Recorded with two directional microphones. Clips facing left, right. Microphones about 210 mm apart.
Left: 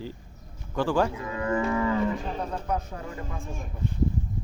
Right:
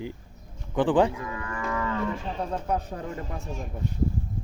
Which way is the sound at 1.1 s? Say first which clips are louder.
Left 7 dB; 25° left (ahead or behind).